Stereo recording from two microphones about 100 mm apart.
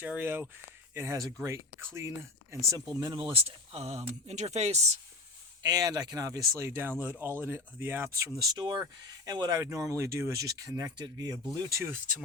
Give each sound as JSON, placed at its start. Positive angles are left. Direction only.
{"t": 0.0, "sound": "speech", "side_deg": -15}
{"t": 0.9, "sound": "speech", "side_deg": -30}
{"t": 3.3, "sound": "speech", "side_deg": -85}
{"t": 5.6, "sound": "speech", "side_deg": -40}